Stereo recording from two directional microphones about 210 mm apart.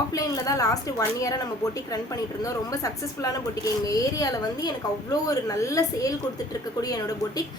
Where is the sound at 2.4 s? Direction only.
15° left (ahead or behind).